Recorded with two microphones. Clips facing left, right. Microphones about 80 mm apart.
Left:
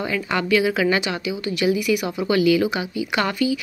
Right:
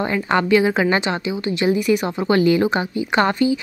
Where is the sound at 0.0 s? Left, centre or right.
Right.